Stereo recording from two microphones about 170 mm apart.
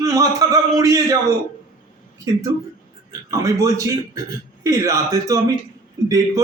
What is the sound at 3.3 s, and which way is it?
A man's voice, 20° right (ahead or behind).